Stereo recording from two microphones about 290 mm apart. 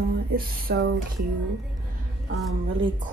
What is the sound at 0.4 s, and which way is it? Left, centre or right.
Speech, right.